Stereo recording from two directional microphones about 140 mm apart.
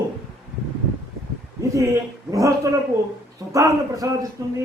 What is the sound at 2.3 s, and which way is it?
A man's voice, 25° right (ahead or behind).